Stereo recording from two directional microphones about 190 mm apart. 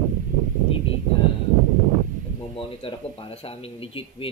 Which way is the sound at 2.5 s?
30° left (ahead or behind).